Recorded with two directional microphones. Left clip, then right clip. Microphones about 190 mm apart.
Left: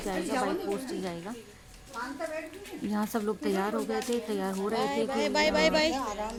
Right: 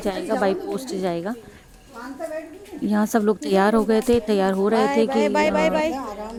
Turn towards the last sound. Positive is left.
turn(degrees=-50)  # may be behind; listen again after turning